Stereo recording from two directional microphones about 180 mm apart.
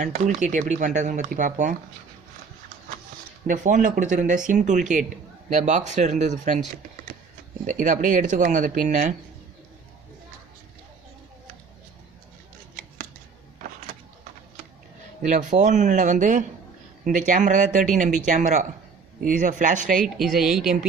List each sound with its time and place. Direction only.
0.1 s speech: 45° right (ahead or behind)
3.4 s speech: 45° right (ahead or behind)
7.7 s speech: 45° right (ahead or behind)
15.2 s speech: 45° right (ahead or behind)
20.1 s speech: centre (ahead or behind)